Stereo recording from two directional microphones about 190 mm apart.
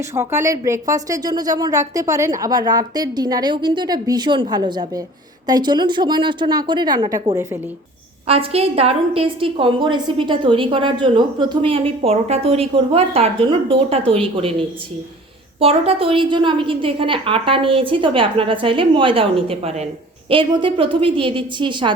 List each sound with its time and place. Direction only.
0.0 s a woman's voice: 15° right (ahead or behind)
8.3 s a woman's voice: 30° right (ahead or behind)
15.6 s a woman's voice: 30° right (ahead or behind)